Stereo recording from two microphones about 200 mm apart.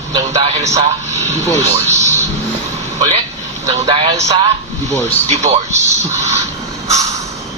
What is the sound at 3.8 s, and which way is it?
Speech, 25° right (ahead or behind).